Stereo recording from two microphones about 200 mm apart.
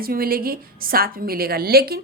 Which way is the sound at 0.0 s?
50° right (ahead or behind).